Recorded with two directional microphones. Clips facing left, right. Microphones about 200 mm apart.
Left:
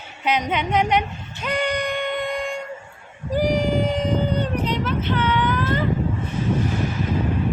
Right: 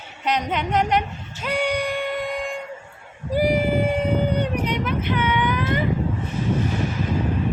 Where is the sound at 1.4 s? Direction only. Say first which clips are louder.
Even; 10° right (ahead or behind).